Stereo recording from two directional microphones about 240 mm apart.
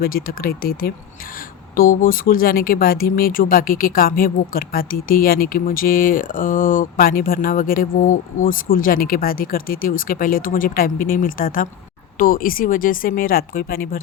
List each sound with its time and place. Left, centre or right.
0.0 s speech: left